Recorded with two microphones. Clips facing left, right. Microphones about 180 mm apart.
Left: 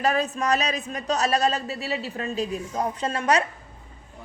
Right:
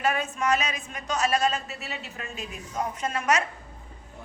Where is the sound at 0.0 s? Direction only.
35° left (ahead or behind).